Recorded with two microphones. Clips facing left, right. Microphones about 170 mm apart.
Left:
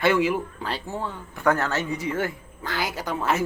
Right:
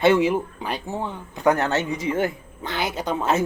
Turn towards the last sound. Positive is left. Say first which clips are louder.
# right 3 dB
turn(degrees=-20)  # may be behind; listen again after turning